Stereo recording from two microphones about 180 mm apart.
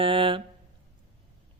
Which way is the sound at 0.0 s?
30° right (ahead or behind).